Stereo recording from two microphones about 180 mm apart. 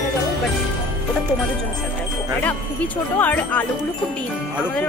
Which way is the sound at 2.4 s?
10° left (ahead or behind).